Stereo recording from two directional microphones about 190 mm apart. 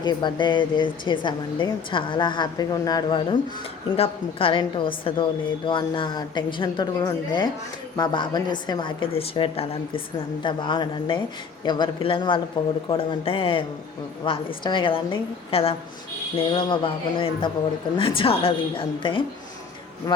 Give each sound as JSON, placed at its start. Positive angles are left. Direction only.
{"t": 0.0, "sound": "a woman's voice", "side_deg": 25}